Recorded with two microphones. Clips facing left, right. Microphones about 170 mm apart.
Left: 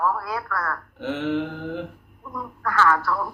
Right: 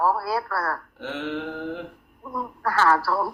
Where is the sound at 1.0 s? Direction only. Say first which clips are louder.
Left 10 dB; centre (ahead or behind).